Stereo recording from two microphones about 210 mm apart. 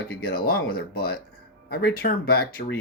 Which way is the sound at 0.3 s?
45° left (ahead or behind).